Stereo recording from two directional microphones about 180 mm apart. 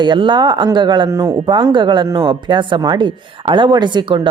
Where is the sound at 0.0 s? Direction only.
25° right (ahead or behind).